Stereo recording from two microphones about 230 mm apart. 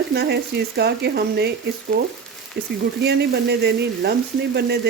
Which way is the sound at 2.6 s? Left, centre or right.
Right.